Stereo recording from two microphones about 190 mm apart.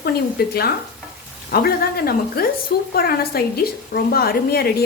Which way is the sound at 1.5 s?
50° left (ahead or behind).